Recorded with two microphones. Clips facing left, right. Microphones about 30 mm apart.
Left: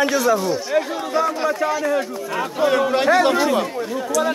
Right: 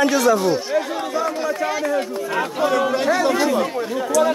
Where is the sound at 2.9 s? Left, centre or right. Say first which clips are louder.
Left 2 dB; left.